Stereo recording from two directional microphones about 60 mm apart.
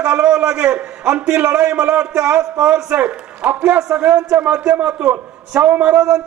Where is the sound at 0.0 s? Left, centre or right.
Centre.